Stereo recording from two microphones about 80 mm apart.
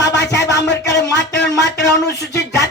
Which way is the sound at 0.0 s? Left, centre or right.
Left.